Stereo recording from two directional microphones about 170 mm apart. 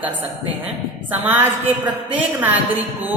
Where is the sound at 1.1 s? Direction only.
10° right (ahead or behind).